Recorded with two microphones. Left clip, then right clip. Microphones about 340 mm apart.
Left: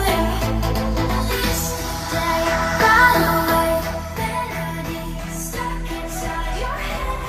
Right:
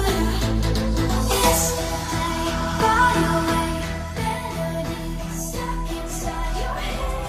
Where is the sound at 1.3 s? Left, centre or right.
Centre.